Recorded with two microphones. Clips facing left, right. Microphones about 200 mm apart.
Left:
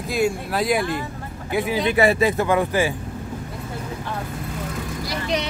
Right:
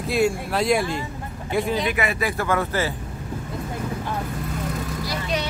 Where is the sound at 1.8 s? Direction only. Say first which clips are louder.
Left 6 dB; 30° left (ahead or behind); by 2.9 s 15° left (ahead or behind).